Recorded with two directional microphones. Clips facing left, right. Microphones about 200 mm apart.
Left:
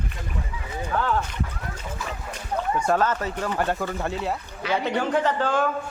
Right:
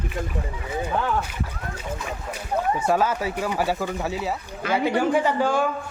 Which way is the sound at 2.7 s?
5° right (ahead or behind).